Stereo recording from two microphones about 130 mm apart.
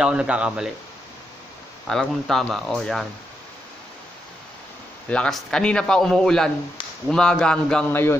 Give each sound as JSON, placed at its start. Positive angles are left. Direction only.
{"t": 0.0, "sound": "speech", "side_deg": -5}
{"t": 1.9, "sound": "a man's voice", "side_deg": 5}
{"t": 5.1, "sound": "a man's voice", "side_deg": 5}
{"t": 7.9, "sound": "a man's voice", "side_deg": 20}